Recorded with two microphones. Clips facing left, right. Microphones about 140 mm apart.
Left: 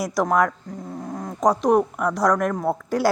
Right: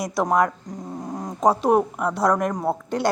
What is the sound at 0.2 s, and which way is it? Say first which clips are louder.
Speech: left 1 dB; centre (ahead or behind).